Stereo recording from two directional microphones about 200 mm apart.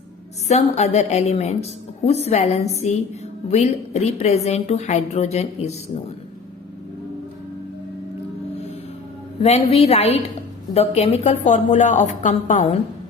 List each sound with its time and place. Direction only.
0.4 s a woman's voice: 35° left (ahead or behind)
9.4 s a woman's voice: 30° left (ahead or behind)